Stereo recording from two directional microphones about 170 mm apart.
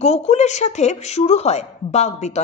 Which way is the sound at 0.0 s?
40° left (ahead or behind).